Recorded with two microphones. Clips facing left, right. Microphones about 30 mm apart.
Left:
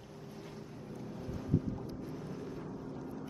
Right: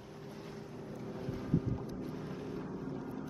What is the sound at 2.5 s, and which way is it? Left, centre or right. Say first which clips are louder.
Vehicle: right 2 dB; centre.